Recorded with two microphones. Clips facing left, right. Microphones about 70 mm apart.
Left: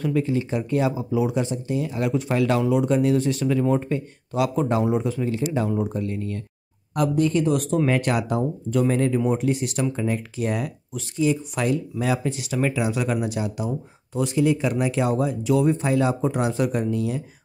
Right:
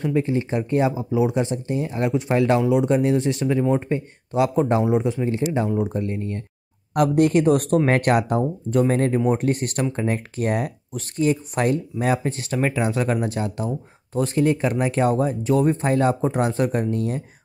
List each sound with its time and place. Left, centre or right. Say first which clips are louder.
0.0 s speech: right 1 dB; right
6.9 s speech: right 4 dB; right
13.4 s speech: right 1 dB; centre
14.1 s speech: right 1 dB; right